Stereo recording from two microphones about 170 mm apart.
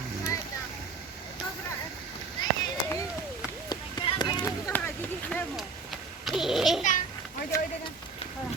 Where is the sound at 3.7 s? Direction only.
25° left (ahead or behind).